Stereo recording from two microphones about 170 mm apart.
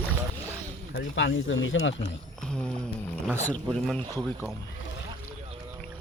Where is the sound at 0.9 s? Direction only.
90° left.